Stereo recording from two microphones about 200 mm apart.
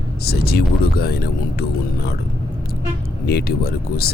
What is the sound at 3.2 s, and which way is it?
Speech, 50° left (ahead or behind).